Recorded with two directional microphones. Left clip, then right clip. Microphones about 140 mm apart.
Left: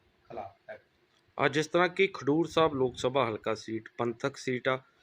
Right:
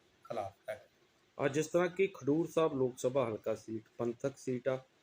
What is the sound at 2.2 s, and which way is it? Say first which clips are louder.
Speech: left 5 dB; 35° left (ahead or behind).